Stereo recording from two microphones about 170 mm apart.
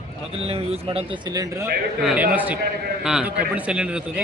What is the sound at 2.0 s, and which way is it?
A man's voice, centre (ahead or behind).